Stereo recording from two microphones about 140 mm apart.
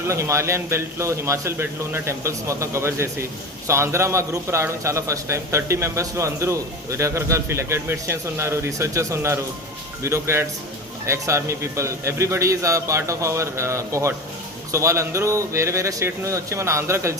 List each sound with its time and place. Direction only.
0.1 s a man's voice: 20° right (ahead or behind)